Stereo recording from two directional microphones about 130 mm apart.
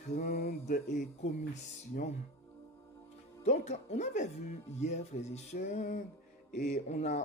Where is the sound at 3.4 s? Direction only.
60° left (ahead or behind).